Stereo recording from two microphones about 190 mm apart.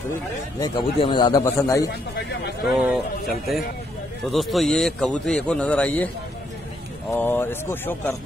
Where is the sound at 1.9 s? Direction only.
60° left (ahead or behind).